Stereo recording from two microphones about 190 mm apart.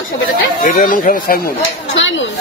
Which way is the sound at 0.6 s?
45° left (ahead or behind).